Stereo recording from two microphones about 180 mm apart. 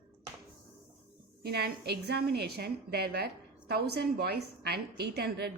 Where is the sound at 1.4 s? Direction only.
60° right (ahead or behind).